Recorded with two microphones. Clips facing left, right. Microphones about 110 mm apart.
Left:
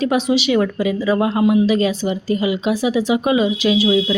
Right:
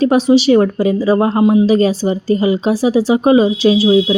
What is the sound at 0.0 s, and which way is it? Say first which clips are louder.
Speech: right 6 dB; 35° right (ahead or behind).